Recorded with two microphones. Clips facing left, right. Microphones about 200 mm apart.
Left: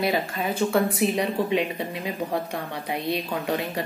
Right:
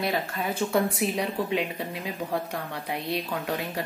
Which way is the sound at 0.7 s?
5° right (ahead or behind).